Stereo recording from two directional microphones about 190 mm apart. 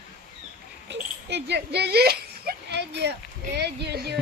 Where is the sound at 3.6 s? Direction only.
60° right (ahead or behind).